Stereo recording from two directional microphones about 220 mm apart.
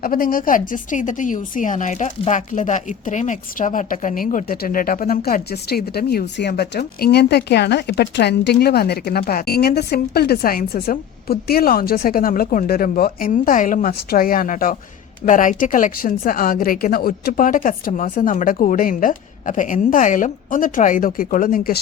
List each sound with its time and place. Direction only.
0.0 s a woman's voice: 40° left (ahead or behind)